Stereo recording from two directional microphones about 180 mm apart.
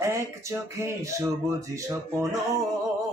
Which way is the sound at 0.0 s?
15° right (ahead or behind).